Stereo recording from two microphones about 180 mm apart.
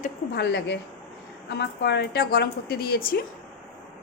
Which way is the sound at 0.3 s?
70° left (ahead or behind).